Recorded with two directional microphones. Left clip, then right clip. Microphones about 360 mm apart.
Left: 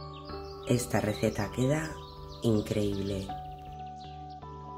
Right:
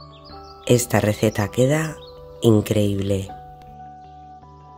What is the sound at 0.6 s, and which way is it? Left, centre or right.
Speech, right.